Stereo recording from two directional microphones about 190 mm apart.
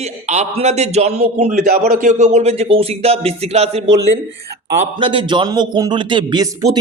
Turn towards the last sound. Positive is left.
turn(degrees=-20)  # may be behind; listen again after turning